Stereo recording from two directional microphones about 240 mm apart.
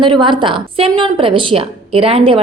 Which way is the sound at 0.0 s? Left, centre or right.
Centre.